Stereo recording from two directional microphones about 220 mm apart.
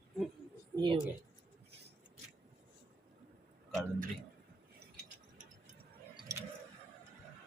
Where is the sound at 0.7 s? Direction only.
20° right (ahead or behind).